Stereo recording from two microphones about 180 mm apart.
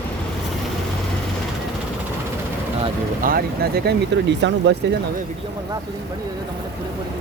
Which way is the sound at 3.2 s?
60° right (ahead or behind).